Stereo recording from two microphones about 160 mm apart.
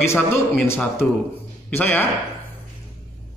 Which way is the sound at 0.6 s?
15° left (ahead or behind).